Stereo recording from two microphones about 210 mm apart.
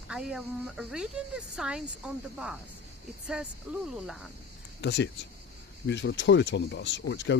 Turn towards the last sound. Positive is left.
turn(degrees=55)  # may be behind; listen again after turning